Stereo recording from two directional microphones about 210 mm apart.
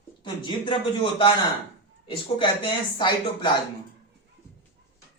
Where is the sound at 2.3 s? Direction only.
20° left (ahead or behind).